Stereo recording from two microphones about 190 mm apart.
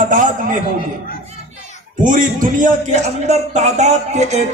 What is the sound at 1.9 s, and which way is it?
Speech, 45° right (ahead or behind).